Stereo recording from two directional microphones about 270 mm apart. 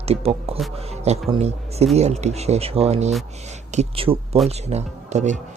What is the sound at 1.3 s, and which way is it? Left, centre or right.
A man's voice, right.